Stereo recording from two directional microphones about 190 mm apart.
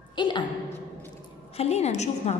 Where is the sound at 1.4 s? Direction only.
35° left (ahead or behind).